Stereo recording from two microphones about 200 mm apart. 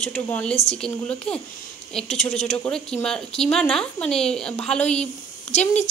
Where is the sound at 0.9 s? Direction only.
5° left (ahead or behind).